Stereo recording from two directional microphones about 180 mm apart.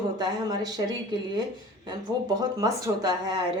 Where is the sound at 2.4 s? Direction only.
20° right (ahead or behind).